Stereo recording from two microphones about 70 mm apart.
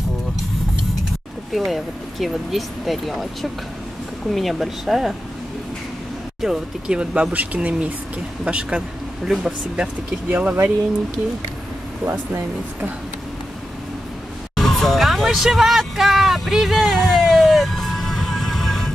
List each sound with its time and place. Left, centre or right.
1.5 s speech: centre
4.3 s speech: centre
6.4 s speech: centre; by 10.7 s right
14.5 s vehicle: centre